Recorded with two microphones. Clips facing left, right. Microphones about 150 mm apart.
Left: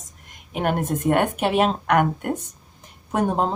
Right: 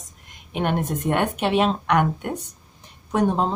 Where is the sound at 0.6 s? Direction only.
45° left (ahead or behind).